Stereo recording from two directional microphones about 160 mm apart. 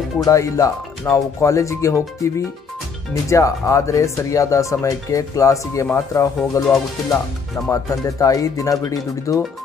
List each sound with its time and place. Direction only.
0.2 s speech: 20° left (ahead or behind)
7.7 s speech: 20° left (ahead or behind)